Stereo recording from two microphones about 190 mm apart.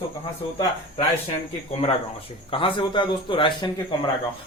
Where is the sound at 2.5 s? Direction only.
25° left (ahead or behind).